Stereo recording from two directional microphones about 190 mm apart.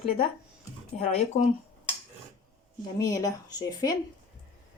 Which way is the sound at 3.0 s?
20° left (ahead or behind).